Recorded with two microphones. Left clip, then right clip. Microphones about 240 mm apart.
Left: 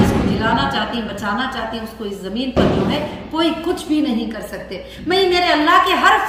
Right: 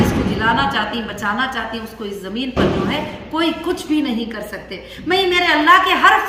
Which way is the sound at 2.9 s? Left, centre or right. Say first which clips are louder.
Even; centre.